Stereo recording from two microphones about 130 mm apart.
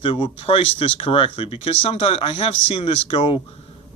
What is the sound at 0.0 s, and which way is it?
Speech, 40° left (ahead or behind).